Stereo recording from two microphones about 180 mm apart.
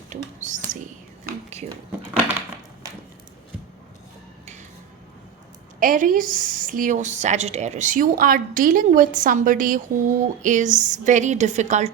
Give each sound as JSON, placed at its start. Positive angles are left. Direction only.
{"t": 0.1, "sound": "whispering", "side_deg": -45}
{"t": 5.8, "sound": "a woman's voice", "side_deg": -50}